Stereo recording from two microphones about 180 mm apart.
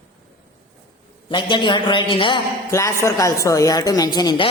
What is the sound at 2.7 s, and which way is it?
Speech, 15° left (ahead or behind).